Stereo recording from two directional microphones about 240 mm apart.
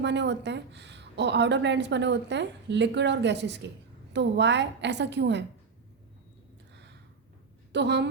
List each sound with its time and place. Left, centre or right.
0.0 s a woman's voice: right
7.7 s a woman's voice: right